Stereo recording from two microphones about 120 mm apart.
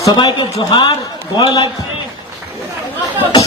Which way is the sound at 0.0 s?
35° left (ahead or behind).